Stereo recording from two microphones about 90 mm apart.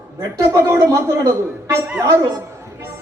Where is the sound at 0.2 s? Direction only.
35° right (ahead or behind).